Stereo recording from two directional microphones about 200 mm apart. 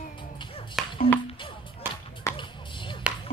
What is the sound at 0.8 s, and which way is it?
Music, centre (ahead or behind).